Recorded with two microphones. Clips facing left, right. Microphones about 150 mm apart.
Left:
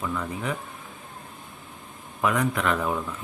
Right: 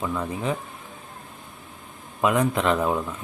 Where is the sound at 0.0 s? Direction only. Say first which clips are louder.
Right 3 dB; 20° right (ahead or behind).